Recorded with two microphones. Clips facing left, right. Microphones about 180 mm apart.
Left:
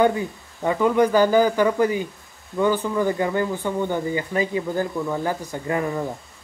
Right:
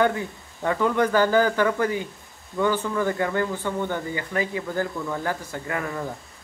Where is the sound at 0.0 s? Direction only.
15° left (ahead or behind).